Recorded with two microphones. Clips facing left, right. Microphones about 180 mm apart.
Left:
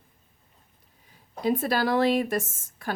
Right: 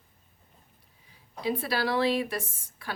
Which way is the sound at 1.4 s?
45° left (ahead or behind).